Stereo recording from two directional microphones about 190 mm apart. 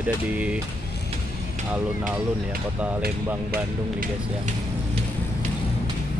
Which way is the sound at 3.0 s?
50° right (ahead or behind).